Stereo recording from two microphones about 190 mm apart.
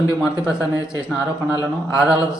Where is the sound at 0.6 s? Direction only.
15° left (ahead or behind).